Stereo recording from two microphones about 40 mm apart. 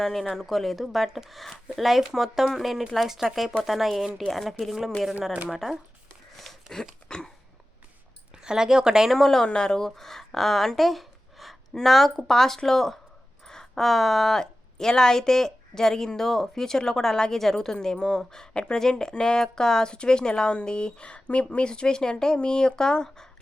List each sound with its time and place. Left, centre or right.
0.0 s speech: centre
6.3 s a sound: centre
7.1 s speech: centre
8.3 s speech: centre
9.0 s a woman's voice: centre